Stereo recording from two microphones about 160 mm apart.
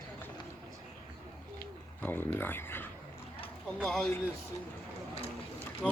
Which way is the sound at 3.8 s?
5° left (ahead or behind).